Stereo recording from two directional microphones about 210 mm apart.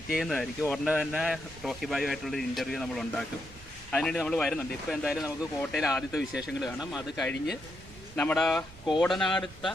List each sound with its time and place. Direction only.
0.1 s speech: centre (ahead or behind)